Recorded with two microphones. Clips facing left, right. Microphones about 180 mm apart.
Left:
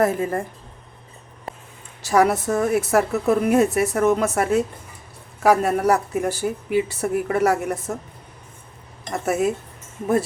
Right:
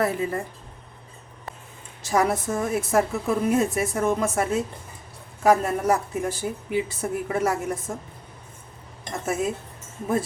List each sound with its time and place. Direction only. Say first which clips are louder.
0.0 s a woman's voice: left 4 dB; 45° left (ahead or behind)
2.0 s a woman's voice: left 5 dB; 70° left (ahead or behind)
9.2 s a woman's voice: left 5 dB; 65° left (ahead or behind)